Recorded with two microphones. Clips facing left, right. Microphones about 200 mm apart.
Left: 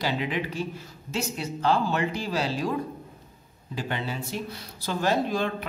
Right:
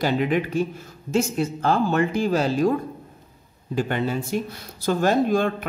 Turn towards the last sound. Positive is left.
turn(degrees=-50)  # may be behind; listen again after turning